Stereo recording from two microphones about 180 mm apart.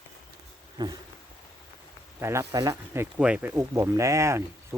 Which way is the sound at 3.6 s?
15° right (ahead or behind).